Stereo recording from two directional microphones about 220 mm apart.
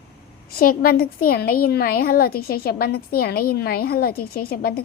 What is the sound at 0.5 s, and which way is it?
A woman's voice, 40° left (ahead or behind).